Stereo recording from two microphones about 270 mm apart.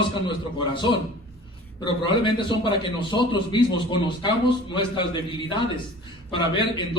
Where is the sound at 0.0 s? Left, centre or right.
Centre.